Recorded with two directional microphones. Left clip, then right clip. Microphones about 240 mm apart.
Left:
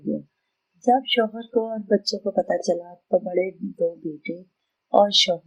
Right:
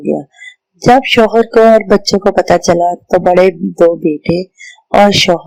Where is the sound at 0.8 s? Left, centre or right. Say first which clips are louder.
Right 12 dB; right.